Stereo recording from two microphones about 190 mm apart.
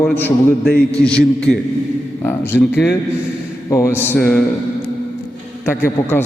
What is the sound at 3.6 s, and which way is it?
Speech, 15° left (ahead or behind).